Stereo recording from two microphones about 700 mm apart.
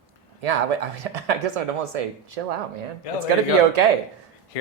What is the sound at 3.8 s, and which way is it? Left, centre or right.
Speech, right.